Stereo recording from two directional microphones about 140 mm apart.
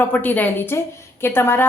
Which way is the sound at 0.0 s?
15° left (ahead or behind).